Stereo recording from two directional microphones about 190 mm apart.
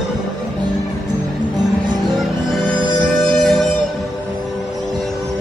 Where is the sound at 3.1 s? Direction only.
Centre (ahead or behind).